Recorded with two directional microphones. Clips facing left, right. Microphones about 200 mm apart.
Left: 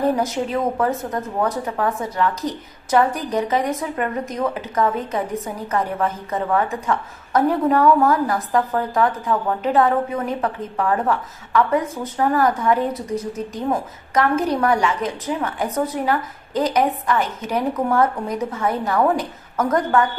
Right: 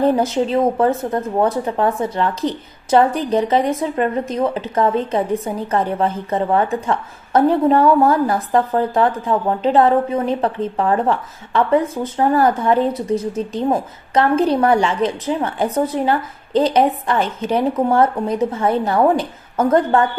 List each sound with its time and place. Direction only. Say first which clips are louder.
0.2 s a woman's voice: right 5 dB; 25° right (ahead or behind)